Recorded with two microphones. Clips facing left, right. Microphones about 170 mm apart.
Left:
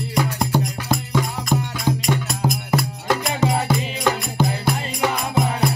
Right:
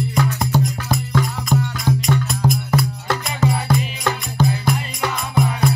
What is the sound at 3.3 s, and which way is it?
Music, 30° left (ahead or behind).